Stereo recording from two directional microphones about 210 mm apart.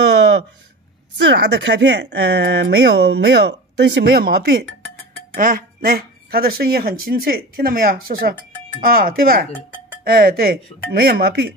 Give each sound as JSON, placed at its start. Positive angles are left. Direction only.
{"t": 1.1, "sound": "speech", "side_deg": -55}